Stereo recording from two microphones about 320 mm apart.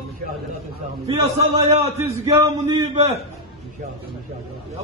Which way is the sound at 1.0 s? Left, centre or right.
Centre.